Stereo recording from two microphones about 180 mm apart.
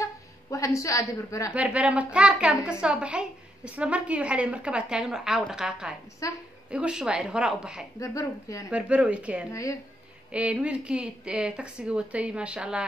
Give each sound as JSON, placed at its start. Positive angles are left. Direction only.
{"t": 0.0, "sound": "a sound", "side_deg": 15}
{"t": 1.5, "sound": "a woman's voice", "side_deg": -5}
{"t": 6.2, "sound": "a woman's voice", "side_deg": 20}
{"t": 6.7, "sound": "a woman's voice", "side_deg": -5}
{"t": 8.0, "sound": "speech", "side_deg": 20}
{"t": 8.6, "sound": "speech", "side_deg": -5}
{"t": 9.5, "sound": "speech", "side_deg": 15}
{"t": 10.3, "sound": "a woman's voice", "side_deg": -5}